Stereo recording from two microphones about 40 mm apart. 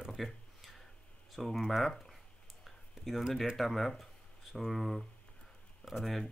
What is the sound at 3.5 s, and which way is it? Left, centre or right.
Speech, centre.